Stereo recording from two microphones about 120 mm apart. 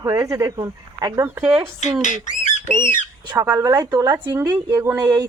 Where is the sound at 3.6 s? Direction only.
25° right (ahead or behind).